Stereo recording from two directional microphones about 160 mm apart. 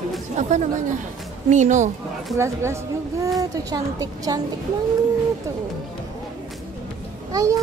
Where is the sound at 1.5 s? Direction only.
50° right (ahead or behind).